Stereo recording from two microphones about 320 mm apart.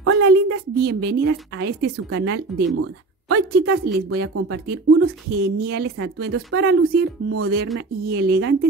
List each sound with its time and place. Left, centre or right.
0.0 s a woman's voice: right
3.3 s a woman's voice: right